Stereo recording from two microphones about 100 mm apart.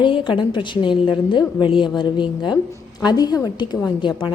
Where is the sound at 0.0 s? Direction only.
55° left (ahead or behind).